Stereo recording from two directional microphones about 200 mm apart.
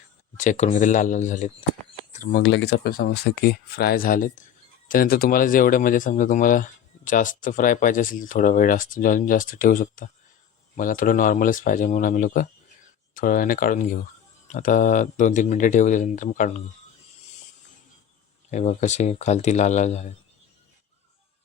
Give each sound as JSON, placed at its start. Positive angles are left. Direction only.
{"t": 0.3, "sound": "speech", "side_deg": 35}
{"t": 2.4, "sound": "speech", "side_deg": 65}
{"t": 18.5, "sound": "speech", "side_deg": 35}